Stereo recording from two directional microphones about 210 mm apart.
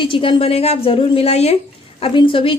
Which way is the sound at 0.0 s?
25° left (ahead or behind).